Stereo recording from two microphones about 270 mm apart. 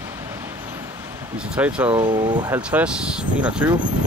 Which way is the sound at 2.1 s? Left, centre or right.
Centre.